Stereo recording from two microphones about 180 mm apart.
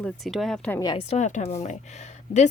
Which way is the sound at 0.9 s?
40° left (ahead or behind).